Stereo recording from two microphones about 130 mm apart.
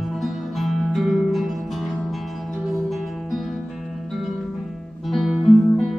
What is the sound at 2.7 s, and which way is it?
Music, centre (ahead or behind).